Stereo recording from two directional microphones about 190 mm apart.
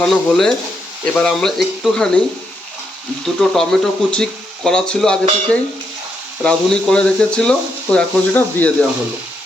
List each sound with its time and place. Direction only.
0.0 s speech: 5° left (ahead or behind)
3.5 s speech: centre (ahead or behind)